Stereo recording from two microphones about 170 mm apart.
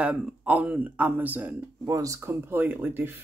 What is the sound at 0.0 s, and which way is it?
Speech, 5° right (ahead or behind).